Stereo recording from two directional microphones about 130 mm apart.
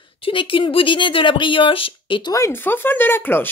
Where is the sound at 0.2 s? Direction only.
40° left (ahead or behind).